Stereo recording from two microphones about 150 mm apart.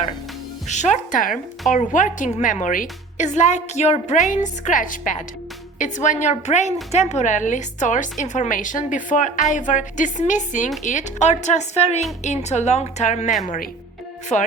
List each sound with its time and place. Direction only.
0.7 s a woman's voice: 50° left (ahead or behind)
14.3 s speech: 10° left (ahead or behind)